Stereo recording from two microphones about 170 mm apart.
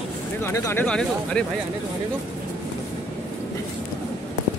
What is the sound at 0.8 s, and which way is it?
Speech, 5° left (ahead or behind).